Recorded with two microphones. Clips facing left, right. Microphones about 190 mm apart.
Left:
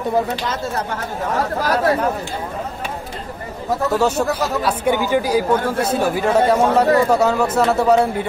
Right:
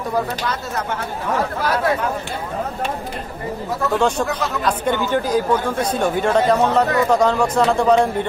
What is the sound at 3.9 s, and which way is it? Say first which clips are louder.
Speech: even; 5° left (ahead or behind).